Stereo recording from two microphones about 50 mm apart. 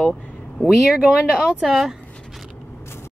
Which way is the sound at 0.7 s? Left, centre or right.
Centre.